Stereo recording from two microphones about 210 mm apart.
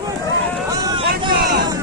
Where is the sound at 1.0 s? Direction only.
45° right (ahead or behind).